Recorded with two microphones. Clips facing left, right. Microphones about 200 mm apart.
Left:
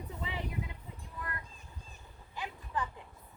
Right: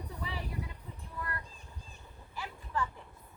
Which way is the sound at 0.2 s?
20° left (ahead or behind).